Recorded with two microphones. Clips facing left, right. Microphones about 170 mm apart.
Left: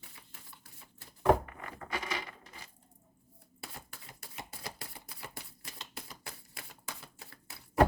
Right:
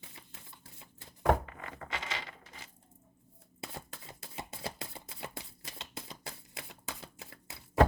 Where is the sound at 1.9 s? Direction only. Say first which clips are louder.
Left 3 dB; 25° right (ahead or behind).